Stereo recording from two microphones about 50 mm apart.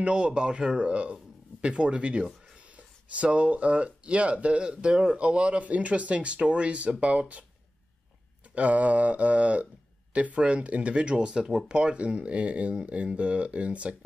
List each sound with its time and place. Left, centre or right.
0.0 s speech: right
8.5 s speech: right